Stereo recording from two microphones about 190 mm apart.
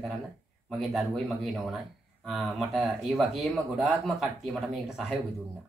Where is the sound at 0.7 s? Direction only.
Centre (ahead or behind).